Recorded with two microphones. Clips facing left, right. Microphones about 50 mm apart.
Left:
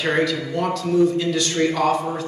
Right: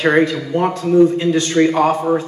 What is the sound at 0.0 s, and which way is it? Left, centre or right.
A man's voice, right.